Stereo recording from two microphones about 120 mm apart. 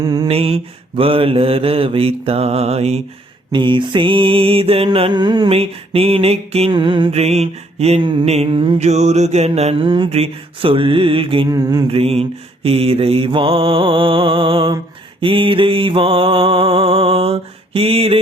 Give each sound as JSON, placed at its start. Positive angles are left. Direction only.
{"t": 0.0, "sound": "a sound", "side_deg": -35}
{"t": 0.3, "sound": "mantra", "side_deg": -55}
{"t": 3.5, "sound": "mantra", "side_deg": -40}
{"t": 4.9, "sound": "a sound", "side_deg": -40}
{"t": 5.5, "sound": "mantra", "side_deg": -55}
{"t": 6.7, "sound": "mantra", "side_deg": -45}
{"t": 7.1, "sound": "mantra", "side_deg": -60}
{"t": 8.8, "sound": "mantra", "side_deg": -70}
{"t": 11.5, "sound": "a sound", "side_deg": -35}
{"t": 11.9, "sound": "mantra", "side_deg": -55}